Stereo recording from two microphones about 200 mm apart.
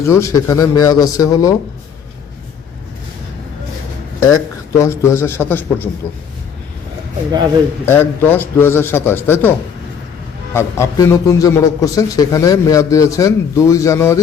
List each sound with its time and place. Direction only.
0.0 s a man's voice: 15° left (ahead or behind)
4.8 s a man's voice: 15° left (ahead or behind)
7.9 s a man's voice: 10° left (ahead or behind)
10.5 s a man's voice: 15° left (ahead or behind)